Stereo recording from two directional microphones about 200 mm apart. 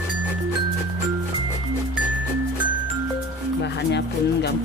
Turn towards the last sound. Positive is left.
turn(degrees=60)  # may be behind; listen again after turning